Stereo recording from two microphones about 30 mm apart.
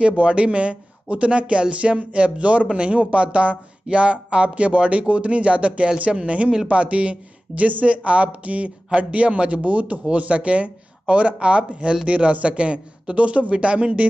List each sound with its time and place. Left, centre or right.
0.2 s speech: right